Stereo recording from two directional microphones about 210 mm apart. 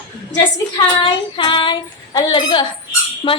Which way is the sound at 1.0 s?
25° left (ahead or behind).